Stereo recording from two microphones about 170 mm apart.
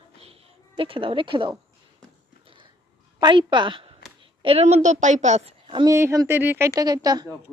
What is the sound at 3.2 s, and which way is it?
A woman's voice, 25° right (ahead or behind).